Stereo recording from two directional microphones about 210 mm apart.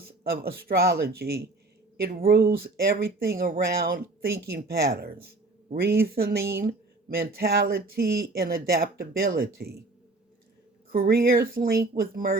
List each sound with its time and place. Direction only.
0.0 s speech: 45° right (ahead or behind)
10.8 s speech: 45° right (ahead or behind)